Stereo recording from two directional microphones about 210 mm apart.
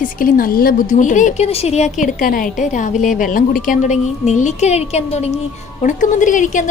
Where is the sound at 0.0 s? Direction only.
40° left (ahead or behind).